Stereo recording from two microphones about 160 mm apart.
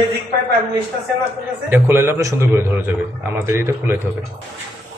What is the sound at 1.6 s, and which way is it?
A man's voice, 15° right (ahead or behind).